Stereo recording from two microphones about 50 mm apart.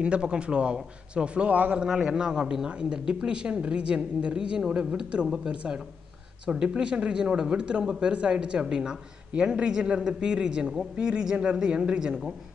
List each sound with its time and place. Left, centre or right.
0.0 s speech: centre
6.5 s speech: centre